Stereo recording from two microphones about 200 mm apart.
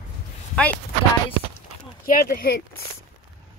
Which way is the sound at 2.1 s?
50° left (ahead or behind).